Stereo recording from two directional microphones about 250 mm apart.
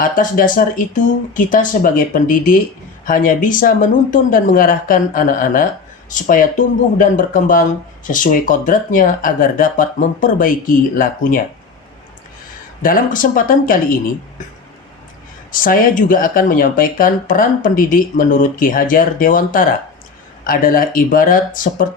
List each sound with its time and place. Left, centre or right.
0.0 s speech: left
12.8 s speech: left
15.5 s speech: left